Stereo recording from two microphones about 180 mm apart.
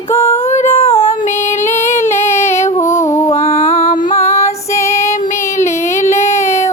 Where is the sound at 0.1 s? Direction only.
15° left (ahead or behind).